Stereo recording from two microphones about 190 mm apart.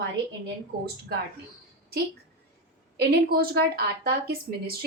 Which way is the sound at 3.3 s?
55° right (ahead or behind).